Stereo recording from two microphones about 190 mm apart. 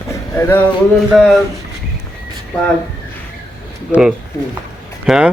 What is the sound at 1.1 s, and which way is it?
Speech, centre (ahead or behind).